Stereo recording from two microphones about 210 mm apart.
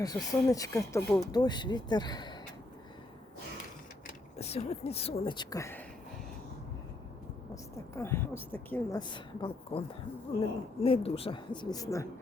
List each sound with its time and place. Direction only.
0.0 s speech: 15° left (ahead or behind)
4.4 s speech: 30° left (ahead or behind); by 5.8 s 15° left (ahead or behind)
7.5 s speech: 10° left (ahead or behind)
9.0 s speech: 20° left (ahead or behind)
10.8 s speech: 25° left (ahead or behind)